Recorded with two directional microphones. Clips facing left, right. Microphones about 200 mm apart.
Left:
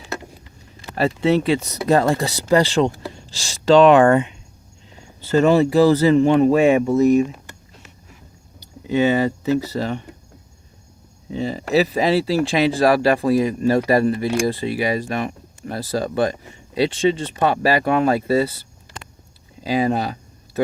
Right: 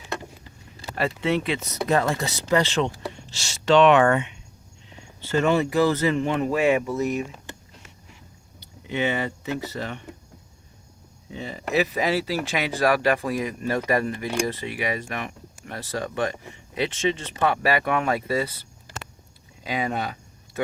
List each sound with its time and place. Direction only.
0.9 s speech: 35° left (ahead or behind)
8.9 s speech: 35° left (ahead or behind)
11.3 s speech: 30° left (ahead or behind)
19.6 s speech: 35° left (ahead or behind)